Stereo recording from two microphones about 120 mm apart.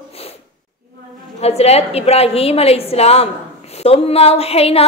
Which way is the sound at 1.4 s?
60° left (ahead or behind).